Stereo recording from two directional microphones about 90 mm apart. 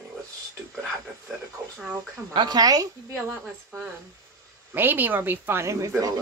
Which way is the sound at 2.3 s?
50° right (ahead or behind).